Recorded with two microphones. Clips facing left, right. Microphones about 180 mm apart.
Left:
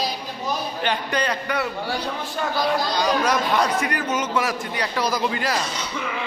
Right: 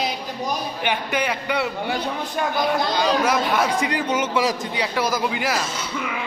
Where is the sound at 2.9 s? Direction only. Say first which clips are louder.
Right 1 dB; 5° right (ahead or behind).